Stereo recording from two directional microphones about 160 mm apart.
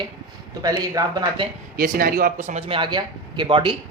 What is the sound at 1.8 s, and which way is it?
Speech, 65° right (ahead or behind).